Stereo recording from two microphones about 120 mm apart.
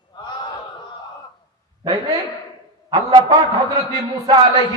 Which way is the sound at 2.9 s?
35° right (ahead or behind).